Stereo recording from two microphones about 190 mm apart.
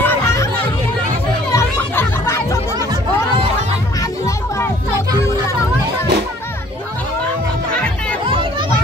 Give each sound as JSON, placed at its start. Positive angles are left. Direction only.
{"t": 0.0, "sound": "chatter", "side_deg": 10}
{"t": 1.5, "sound": "music", "side_deg": 15}
{"t": 8.3, "sound": "children playing", "side_deg": -25}